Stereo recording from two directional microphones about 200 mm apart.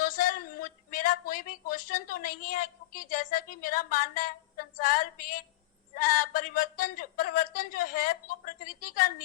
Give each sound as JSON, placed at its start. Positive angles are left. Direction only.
{"t": 0.0, "sound": "a man's voice", "side_deg": 40}